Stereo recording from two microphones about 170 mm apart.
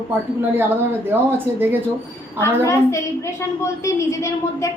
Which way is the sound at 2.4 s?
15° left (ahead or behind).